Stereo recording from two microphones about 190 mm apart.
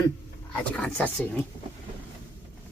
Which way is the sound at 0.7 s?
5° left (ahead or behind).